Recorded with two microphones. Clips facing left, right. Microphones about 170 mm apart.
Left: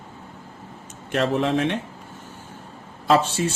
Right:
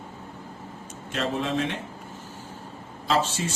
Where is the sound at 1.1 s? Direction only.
65° left (ahead or behind).